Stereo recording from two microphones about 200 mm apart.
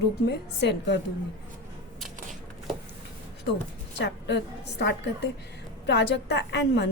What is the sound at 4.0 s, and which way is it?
A woman's voice, 60° left (ahead or behind).